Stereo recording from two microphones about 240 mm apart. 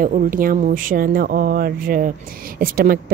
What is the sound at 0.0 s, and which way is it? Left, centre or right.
A woman's voice, right.